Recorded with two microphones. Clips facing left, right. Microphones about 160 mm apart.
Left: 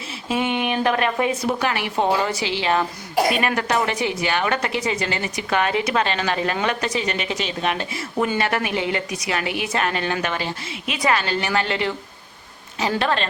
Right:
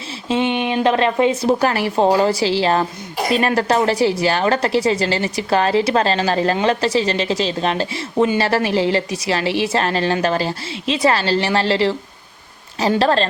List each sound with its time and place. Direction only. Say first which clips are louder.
0.3 s a woman's voice: right 4 dB; 25° right (ahead or behind)
13.0 s a woman's voice: right 6 dB; 35° right (ahead or behind)